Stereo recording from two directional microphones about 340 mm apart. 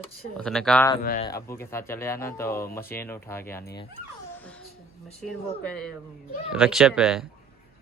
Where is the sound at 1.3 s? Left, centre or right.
Centre.